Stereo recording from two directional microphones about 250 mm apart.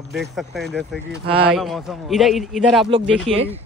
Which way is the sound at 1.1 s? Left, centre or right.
Right.